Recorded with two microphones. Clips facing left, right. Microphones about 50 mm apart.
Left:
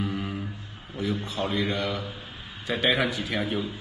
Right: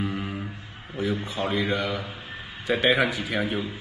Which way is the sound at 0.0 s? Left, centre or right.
Centre.